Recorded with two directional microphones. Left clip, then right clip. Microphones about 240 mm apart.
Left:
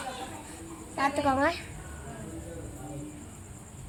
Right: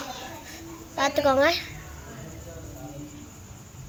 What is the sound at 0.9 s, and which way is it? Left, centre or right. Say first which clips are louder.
Speech: right 5 dB; centre.